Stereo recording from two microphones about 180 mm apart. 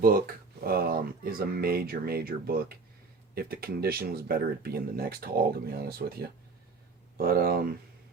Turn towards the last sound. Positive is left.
turn(degrees=-55)  # may be behind; listen again after turning